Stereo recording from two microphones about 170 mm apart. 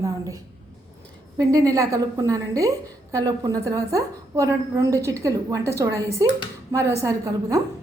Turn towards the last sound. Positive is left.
turn(degrees=-20)  # may be behind; listen again after turning